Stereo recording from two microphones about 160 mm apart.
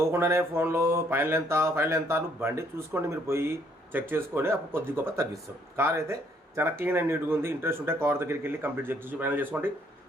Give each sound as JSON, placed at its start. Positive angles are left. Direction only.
{"t": 0.0, "sound": "mantra", "side_deg": -15}